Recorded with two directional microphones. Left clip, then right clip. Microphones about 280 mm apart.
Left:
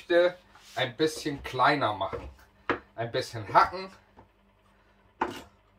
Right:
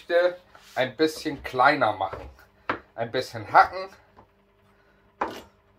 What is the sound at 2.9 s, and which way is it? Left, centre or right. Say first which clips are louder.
Speech: right 3 dB; centre.